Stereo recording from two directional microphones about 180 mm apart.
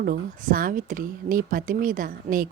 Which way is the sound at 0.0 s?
50° right (ahead or behind).